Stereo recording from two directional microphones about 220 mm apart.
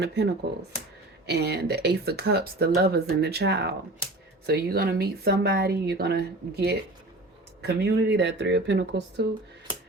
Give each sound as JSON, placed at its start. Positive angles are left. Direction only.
{"t": 0.0, "sound": "speech", "side_deg": -50}
{"t": 7.8, "sound": "speech", "side_deg": -50}